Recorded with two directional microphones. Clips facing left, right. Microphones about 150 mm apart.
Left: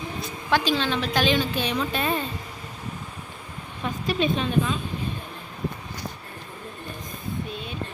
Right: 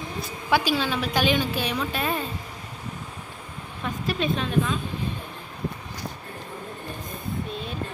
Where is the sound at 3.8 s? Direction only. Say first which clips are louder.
Left 2 dB; centre (ahead or behind).